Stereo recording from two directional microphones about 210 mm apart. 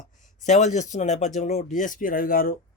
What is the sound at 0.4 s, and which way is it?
Speech, 35° left (ahead or behind).